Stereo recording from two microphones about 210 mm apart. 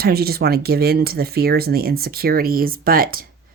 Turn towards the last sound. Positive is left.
turn(degrees=-45)  # may be behind; listen again after turning